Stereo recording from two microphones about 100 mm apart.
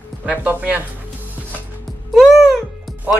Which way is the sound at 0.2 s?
15° right (ahead or behind).